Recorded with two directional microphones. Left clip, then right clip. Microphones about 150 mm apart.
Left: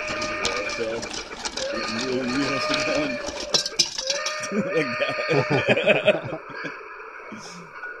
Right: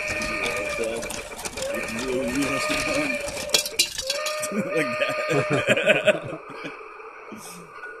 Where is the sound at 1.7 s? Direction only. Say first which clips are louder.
Even; 45° right (ahead or behind).